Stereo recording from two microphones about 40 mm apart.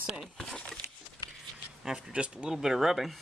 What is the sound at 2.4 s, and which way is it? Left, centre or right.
Speech, centre.